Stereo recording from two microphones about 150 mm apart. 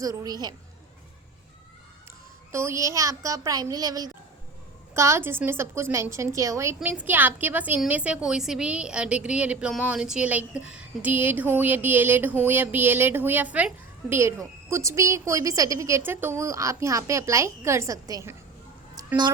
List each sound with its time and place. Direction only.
0.0 s a woman's voice: 25° right (ahead or behind)
2.5 s a woman's voice: 15° right (ahead or behind)
18.9 s a sound: 30° right (ahead or behind)